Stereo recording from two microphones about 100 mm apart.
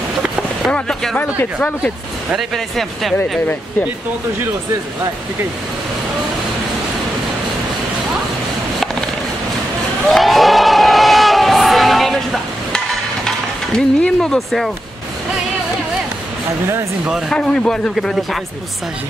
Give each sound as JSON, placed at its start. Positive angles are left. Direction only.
{"t": 0.2, "sound": "a sound", "side_deg": -10}
{"t": 0.7, "sound": "speech", "side_deg": 10}
{"t": 2.3, "sound": "speech", "side_deg": 0}
{"t": 10.0, "sound": "crowd", "side_deg": 0}
{"t": 13.7, "sound": "speech", "side_deg": 5}
{"t": 17.3, "sound": "speech", "side_deg": 5}